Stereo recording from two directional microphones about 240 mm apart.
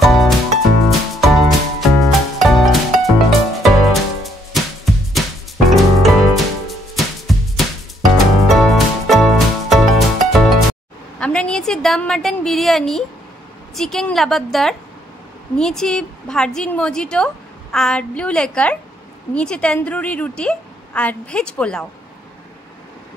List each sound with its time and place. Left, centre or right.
0.0 s music: centre
11.1 s a sound: centre
13.7 s a woman's voice: centre